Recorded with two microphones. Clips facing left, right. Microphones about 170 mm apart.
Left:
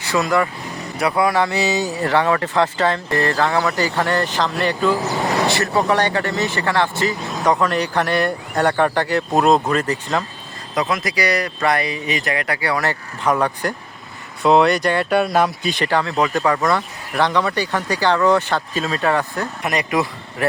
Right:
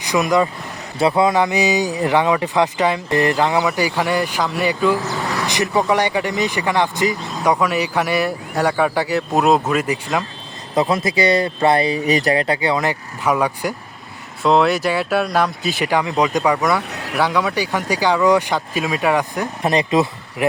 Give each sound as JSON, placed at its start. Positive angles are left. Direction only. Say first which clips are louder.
{"t": 0.0, "sound": "speech", "louder": "right 2 dB", "side_deg": -15}
{"t": 10.8, "sound": "speech", "louder": "right 4 dB", "side_deg": -30}
{"t": 14.4, "sound": "speech", "louder": "left 1 dB", "side_deg": 0}
{"t": 16.9, "sound": "vehicle", "louder": "right 5 dB", "side_deg": -75}
{"t": 17.2, "sound": "speech", "louder": "even", "side_deg": -10}
{"t": 19.6, "sound": "speech", "louder": "right 4 dB", "side_deg": -25}